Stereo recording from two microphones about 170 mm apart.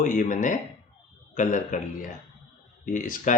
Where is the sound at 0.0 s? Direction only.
50° left (ahead or behind).